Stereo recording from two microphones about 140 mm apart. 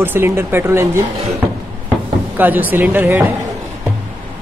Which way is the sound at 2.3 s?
10° right (ahead or behind).